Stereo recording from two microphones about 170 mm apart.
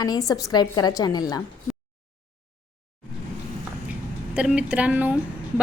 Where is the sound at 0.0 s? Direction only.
20° left (ahead or behind).